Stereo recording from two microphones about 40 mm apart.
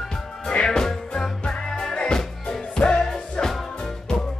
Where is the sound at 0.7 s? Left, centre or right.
Centre.